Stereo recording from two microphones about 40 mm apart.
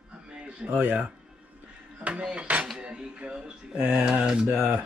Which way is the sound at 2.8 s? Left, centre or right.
Right.